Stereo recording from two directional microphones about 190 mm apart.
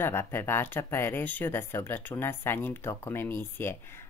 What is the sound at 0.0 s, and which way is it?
Speech, 10° left (ahead or behind).